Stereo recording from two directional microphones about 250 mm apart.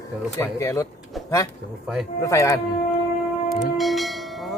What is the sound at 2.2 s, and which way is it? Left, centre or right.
Speech, centre.